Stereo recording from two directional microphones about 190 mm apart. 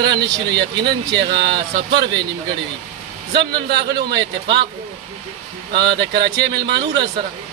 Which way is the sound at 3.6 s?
60° right (ahead or behind).